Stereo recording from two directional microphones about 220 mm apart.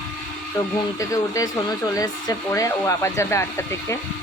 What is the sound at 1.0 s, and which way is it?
Speech, 15° left (ahead or behind).